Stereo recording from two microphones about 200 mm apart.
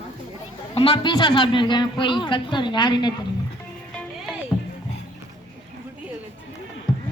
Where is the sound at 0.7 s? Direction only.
30° left (ahead or behind).